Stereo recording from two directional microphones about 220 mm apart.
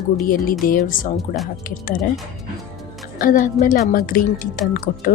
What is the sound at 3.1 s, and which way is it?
A woman's voice, 40° left (ahead or behind).